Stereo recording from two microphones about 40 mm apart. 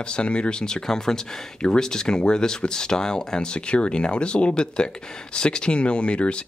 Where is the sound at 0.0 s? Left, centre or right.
Left.